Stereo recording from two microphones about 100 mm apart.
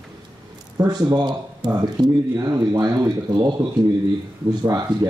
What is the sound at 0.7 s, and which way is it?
Speech, 40° right (ahead or behind).